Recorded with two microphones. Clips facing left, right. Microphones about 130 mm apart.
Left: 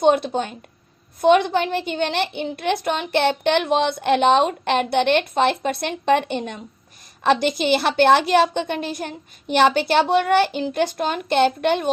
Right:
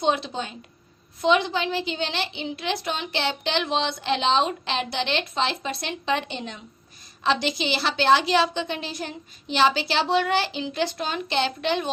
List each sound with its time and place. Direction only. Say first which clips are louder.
0.0 s a woman's voice: left 7 dB; 50° left (ahead or behind)